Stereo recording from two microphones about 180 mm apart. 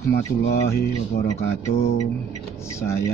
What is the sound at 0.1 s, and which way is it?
Speech, 70° left (ahead or behind).